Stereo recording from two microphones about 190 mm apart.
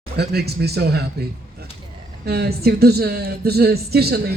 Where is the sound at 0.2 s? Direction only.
55° right (ahead or behind).